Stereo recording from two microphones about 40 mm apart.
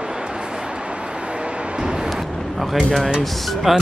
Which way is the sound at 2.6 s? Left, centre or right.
Centre.